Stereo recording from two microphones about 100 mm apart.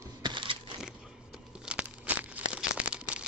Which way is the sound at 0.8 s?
5° right (ahead or behind).